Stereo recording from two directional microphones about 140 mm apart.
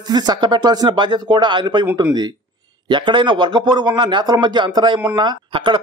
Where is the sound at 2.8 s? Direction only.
35° right (ahead or behind).